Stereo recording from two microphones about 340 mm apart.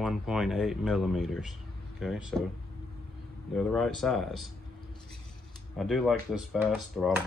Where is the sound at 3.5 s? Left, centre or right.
Centre.